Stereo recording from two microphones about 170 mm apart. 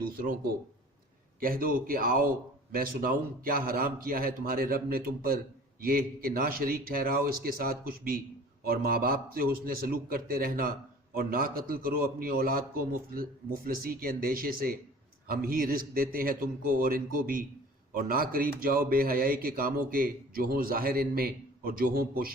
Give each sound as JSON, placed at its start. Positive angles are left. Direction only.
{"t": 0.0, "sound": "a man's voice", "side_deg": -60}